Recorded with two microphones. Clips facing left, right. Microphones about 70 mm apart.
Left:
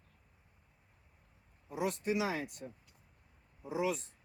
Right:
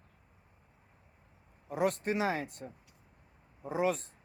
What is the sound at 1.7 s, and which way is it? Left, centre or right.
Speech, right.